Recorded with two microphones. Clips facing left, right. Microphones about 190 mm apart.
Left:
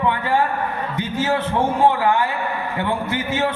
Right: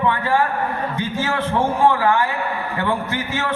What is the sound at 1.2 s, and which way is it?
A man's voice, 15° left (ahead or behind).